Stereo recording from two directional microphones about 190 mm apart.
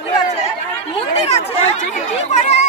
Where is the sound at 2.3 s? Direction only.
35° left (ahead or behind).